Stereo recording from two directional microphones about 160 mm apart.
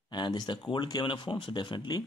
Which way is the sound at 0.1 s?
25° left (ahead or behind).